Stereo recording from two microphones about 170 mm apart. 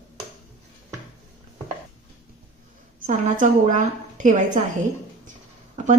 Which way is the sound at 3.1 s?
50° right (ahead or behind).